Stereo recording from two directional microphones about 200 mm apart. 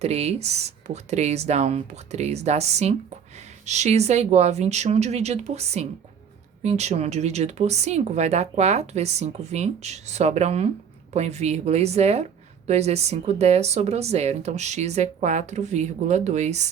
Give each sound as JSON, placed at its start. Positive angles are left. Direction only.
{"t": 0.0, "sound": "a woman's voice", "side_deg": -30}